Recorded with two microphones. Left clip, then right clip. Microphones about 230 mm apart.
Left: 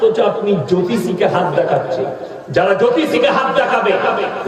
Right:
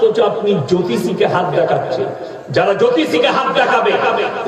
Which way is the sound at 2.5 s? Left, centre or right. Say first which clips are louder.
Even; right.